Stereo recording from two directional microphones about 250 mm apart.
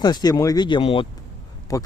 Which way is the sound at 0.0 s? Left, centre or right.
Centre.